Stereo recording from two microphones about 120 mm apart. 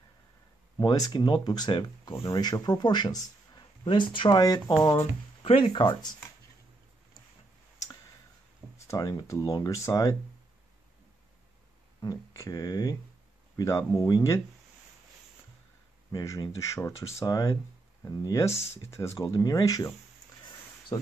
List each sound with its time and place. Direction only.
0.7 s speech: 30° left (ahead or behind)
4.4 s speech: 30° left (ahead or behind)
4.9 s speech: 55° left (ahead or behind)
8.7 s a sound: 25° left (ahead or behind)
9.0 s speech: 35° left (ahead or behind)
12.0 s speech: 30° left (ahead or behind)
16.1 s speech: 35° left (ahead or behind)